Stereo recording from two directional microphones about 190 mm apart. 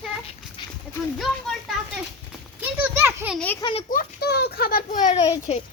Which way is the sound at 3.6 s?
30° left (ahead or behind).